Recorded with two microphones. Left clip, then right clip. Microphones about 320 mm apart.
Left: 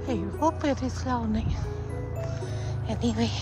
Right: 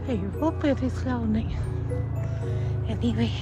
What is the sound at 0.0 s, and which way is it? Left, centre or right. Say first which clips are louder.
Speech: left 1 dB; centre.